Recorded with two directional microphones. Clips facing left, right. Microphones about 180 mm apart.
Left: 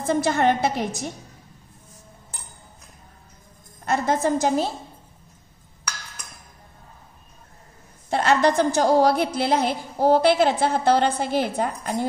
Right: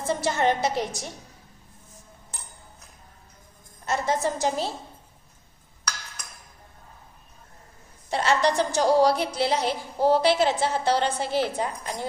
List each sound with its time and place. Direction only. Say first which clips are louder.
0.0 s a woman's voice: left 4 dB; 55° left (ahead or behind)
3.8 s a woman's voice: left 3 dB; 55° left (ahead or behind)
8.1 s a woman's voice: left 3 dB; 55° left (ahead or behind)